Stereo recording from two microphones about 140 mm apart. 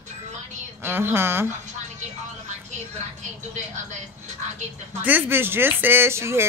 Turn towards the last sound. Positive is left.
turn(degrees=-20)  # may be behind; listen again after turning